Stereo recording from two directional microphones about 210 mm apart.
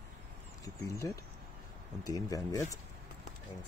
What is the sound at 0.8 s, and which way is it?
Speech, 15° left (ahead or behind).